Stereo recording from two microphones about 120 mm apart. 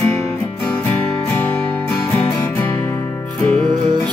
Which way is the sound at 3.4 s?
5° left (ahead or behind).